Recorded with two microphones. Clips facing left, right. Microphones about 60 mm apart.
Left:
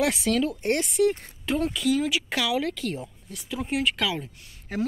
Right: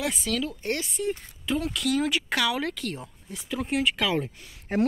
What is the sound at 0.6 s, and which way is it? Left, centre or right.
Speech, left.